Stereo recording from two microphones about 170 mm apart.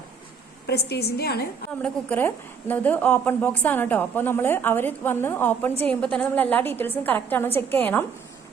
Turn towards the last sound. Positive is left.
turn(degrees=10)  # may be behind; listen again after turning